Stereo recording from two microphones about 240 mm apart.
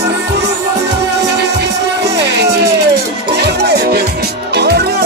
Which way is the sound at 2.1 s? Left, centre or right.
Right.